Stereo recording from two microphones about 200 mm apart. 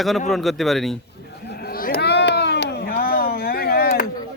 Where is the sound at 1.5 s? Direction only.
50° left (ahead or behind).